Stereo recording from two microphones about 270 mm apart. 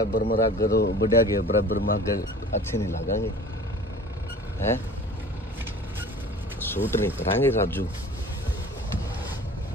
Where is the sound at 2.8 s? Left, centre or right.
Centre.